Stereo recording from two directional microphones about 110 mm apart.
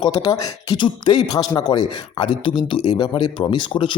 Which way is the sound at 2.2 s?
50° left (ahead or behind).